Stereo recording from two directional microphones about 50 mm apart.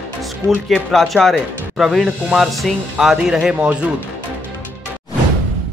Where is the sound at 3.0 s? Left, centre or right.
Centre.